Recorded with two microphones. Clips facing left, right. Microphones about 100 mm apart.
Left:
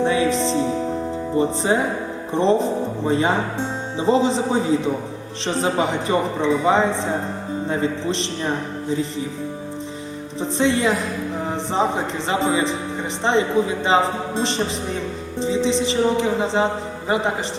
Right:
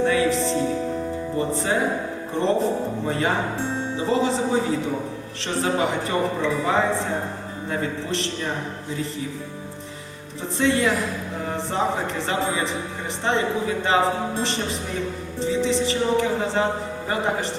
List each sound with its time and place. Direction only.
0.0 s music: 20° left (ahead or behind)
1.4 s speech: 20° left (ahead or behind)
10.4 s speech: 20° left (ahead or behind)
13.8 s speech: 20° left (ahead or behind)